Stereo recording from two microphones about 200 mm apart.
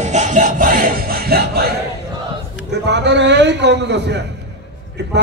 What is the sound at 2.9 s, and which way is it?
A man's voice, 60° right (ahead or behind).